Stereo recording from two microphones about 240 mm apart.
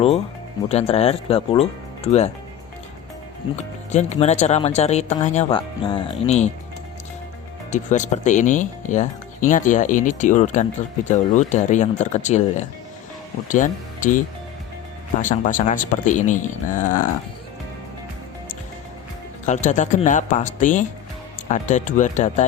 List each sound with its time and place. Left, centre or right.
0.7 s speech: left
3.5 s speech: left
7.7 s speech: left
15.2 s speech: left
19.5 s speech: left